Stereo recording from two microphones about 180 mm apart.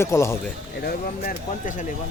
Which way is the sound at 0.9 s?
55° left (ahead or behind).